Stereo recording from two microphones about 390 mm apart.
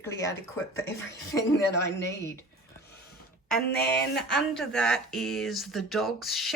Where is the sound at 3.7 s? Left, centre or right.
Left.